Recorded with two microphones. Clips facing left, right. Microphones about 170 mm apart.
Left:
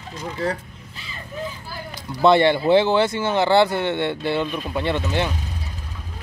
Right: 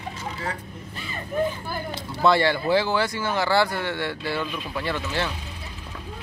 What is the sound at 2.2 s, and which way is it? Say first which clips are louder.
Speech: left 5 dB; 20° left (ahead or behind).